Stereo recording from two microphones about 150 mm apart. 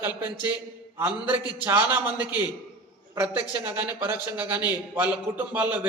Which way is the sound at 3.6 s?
10° right (ahead or behind).